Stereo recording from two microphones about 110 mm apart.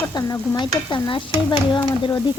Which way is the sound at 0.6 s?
50° left (ahead or behind).